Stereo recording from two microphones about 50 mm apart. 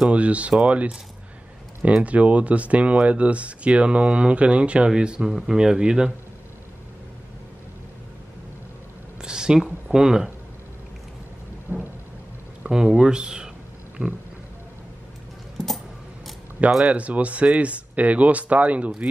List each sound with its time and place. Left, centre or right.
0.1 s speech: right
2.0 s speech: right
9.2 s a sound: centre
9.9 s speech: centre
11.7 s thunder: right
12.6 s speech: centre
14.0 s pig: right
15.5 s a sound: centre
16.8 s speech: right